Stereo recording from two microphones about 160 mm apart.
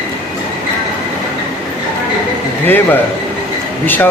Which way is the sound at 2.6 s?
10° left (ahead or behind).